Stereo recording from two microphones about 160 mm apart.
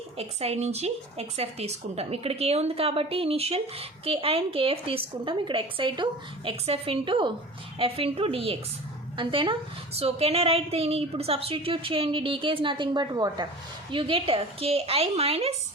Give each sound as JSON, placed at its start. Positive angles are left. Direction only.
{"t": 0.2, "sound": "speech", "side_deg": -40}